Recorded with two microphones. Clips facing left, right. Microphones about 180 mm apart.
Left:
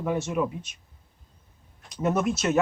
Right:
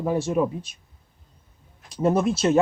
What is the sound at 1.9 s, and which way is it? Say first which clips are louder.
Speech: right 4 dB; 30° right (ahead or behind).